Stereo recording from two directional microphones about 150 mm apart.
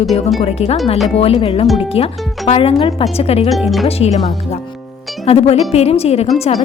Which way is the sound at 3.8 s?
45° left (ahead or behind).